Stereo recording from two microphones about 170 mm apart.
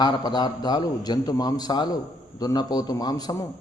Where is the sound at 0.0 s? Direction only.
25° left (ahead or behind).